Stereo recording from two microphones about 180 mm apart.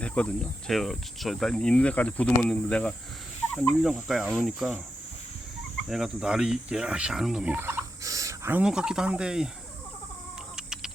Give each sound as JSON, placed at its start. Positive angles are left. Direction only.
{"t": 0.0, "sound": "cricket", "side_deg": 5}
{"t": 0.7, "sound": "speech", "side_deg": 0}
{"t": 5.9, "sound": "speech", "side_deg": -5}
{"t": 10.6, "sound": "chicken", "side_deg": -5}